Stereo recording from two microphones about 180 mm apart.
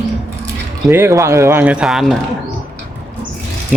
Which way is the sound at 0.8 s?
15° right (ahead or behind).